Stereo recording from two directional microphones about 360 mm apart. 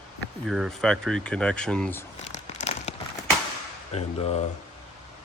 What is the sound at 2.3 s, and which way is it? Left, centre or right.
Crumpling, centre.